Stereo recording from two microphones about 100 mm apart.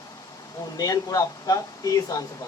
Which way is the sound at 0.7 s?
40° left (ahead or behind).